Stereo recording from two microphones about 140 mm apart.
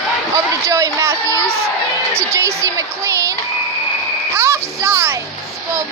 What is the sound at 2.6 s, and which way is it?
Speech, 20° right (ahead or behind).